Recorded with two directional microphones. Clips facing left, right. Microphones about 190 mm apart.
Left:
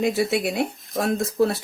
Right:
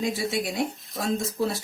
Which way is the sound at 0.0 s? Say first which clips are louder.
Left 6 dB; 60° left (ahead or behind).